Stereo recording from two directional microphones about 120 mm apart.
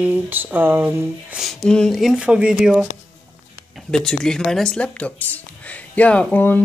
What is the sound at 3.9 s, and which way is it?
Speech, 5° left (ahead or behind).